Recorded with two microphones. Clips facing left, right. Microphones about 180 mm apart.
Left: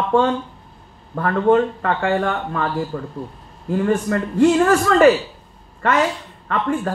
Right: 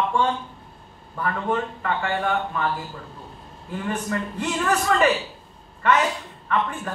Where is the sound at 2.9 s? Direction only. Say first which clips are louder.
Left 12 dB; 55° left (ahead or behind).